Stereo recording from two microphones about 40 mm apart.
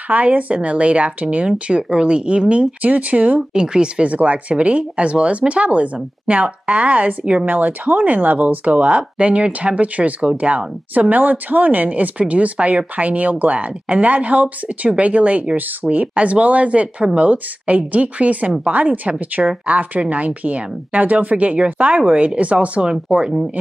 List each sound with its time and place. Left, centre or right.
0.1 s speech: right
2.8 s speech: right
3.5 s speech: right
4.1 s speech: right
23.1 s speech: centre